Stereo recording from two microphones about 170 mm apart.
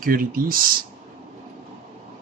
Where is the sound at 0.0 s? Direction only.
55° right (ahead or behind).